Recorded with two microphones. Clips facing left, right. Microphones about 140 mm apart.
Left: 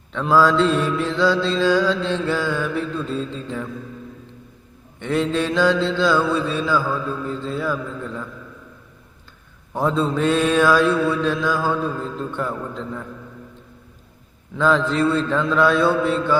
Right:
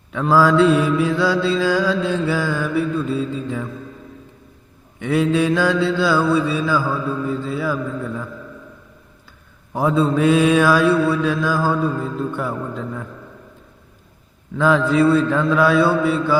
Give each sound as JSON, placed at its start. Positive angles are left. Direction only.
{"t": 0.1, "sound": "mantra", "side_deg": -5}
{"t": 4.9, "sound": "mantra", "side_deg": -10}
{"t": 9.7, "sound": "mantra", "side_deg": -10}
{"t": 14.5, "sound": "mantra", "side_deg": -10}